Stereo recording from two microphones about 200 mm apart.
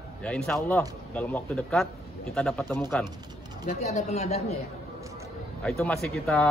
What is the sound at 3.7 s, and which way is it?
Speech, 35° left (ahead or behind).